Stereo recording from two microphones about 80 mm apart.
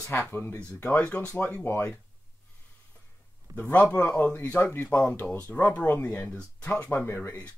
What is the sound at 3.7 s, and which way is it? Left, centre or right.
Speech, centre.